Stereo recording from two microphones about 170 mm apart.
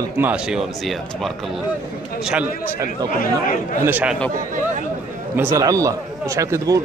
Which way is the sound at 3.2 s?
50° left (ahead or behind).